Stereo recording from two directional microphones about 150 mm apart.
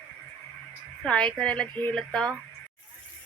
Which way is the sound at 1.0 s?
5° left (ahead or behind).